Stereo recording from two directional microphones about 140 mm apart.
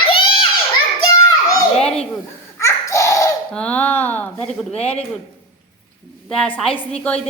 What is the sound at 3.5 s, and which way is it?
Speech, 10° left (ahead or behind).